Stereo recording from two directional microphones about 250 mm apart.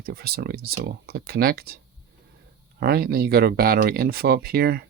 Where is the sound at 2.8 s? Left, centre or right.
Right.